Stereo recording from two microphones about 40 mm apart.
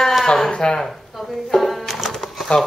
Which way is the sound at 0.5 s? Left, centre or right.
Left.